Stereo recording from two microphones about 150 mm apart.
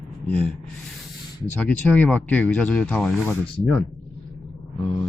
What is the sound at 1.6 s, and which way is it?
Speech, 10° left (ahead or behind).